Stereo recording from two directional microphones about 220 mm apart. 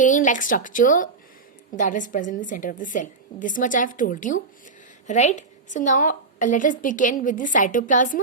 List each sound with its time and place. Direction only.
0.0 s a woman's voice: 35° left (ahead or behind)